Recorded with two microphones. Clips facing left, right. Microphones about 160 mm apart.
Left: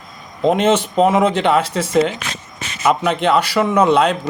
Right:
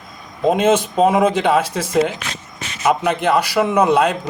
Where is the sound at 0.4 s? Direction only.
10° right (ahead or behind).